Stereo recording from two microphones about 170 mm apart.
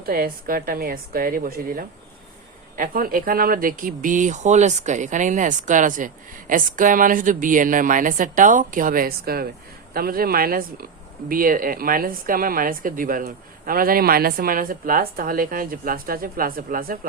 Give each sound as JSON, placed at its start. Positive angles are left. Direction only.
{"t": 0.0, "sound": "speech", "side_deg": -60}